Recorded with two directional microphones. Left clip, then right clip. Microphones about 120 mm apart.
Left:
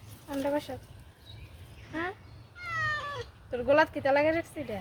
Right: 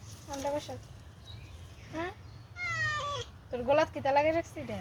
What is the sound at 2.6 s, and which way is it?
Cat, 5° left (ahead or behind).